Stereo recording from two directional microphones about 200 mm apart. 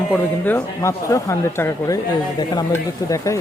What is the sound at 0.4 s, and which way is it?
Speech, 10° left (ahead or behind).